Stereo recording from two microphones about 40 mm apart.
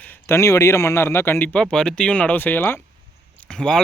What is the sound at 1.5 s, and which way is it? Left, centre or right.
Speech, left.